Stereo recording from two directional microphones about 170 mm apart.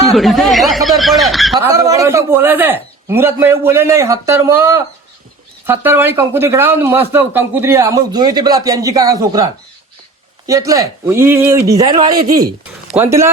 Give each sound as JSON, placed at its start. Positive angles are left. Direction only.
{"t": 0.1, "sound": "speech", "side_deg": 0}
{"t": 1.6, "sound": "a man's voice", "side_deg": -20}
{"t": 12.9, "sound": "speech", "side_deg": -15}